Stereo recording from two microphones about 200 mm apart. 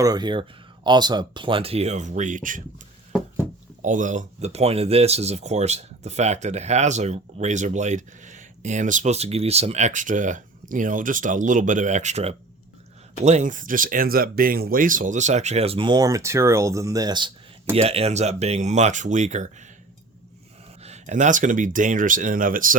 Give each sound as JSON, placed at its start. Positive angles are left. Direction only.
{"t": 0.0, "sound": "speech", "side_deg": -20}
{"t": 3.8, "sound": "speech", "side_deg": -40}
{"t": 20.8, "sound": "speech", "side_deg": -35}